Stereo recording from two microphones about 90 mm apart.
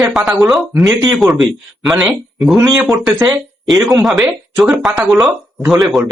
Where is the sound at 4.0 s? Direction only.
Centre (ahead or behind).